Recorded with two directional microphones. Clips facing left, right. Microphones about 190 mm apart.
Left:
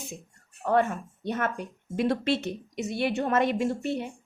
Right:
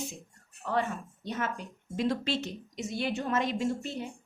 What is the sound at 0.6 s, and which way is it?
A woman's voice, 55° left (ahead or behind).